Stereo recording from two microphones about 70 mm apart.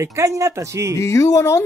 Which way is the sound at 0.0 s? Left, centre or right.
Right.